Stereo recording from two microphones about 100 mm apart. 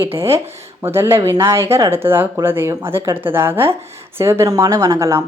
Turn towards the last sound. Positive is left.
turn(degrees=-30)  # may be behind; listen again after turning